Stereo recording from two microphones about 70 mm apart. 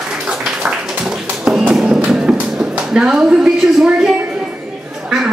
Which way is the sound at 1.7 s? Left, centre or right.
Centre.